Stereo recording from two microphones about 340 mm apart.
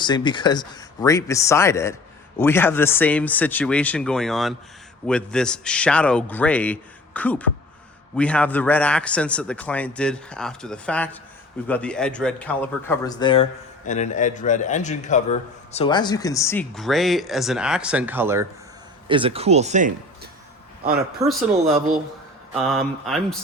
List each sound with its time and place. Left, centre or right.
0.0 s a man's voice: centre
21.2 s speech: centre
22.5 s a man's voice: centre